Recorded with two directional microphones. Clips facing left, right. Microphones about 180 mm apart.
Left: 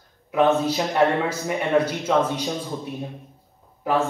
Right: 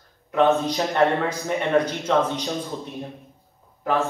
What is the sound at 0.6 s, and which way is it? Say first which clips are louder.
A man's voice: even; 5° left (ahead or behind).